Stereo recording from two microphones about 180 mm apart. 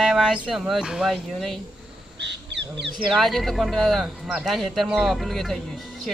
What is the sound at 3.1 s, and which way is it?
Speech, centre (ahead or behind).